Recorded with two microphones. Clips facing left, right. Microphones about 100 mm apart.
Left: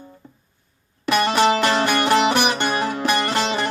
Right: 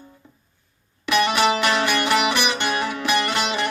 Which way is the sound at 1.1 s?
40° left (ahead or behind).